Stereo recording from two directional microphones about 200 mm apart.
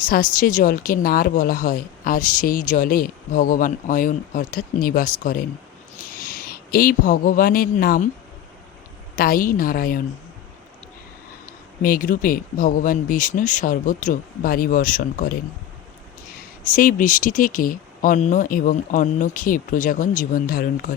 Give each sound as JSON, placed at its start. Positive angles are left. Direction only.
{"t": 0.0, "sound": "a woman's voice", "side_deg": 45}
{"t": 9.1, "sound": "a woman's voice", "side_deg": 45}
{"t": 11.8, "sound": "a woman's voice", "side_deg": 45}
{"t": 16.6, "sound": "a woman's voice", "side_deg": 45}